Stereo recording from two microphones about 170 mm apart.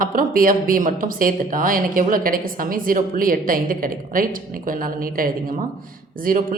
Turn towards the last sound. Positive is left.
turn(degrees=-55)  # may be behind; listen again after turning